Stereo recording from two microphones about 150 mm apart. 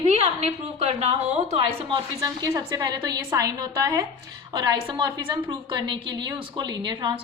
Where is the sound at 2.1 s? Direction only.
25° right (ahead or behind).